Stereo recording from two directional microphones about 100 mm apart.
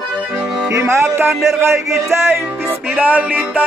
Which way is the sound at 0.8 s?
25° right (ahead or behind).